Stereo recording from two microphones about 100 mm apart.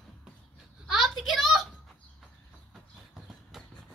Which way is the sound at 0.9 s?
Centre (ahead or behind).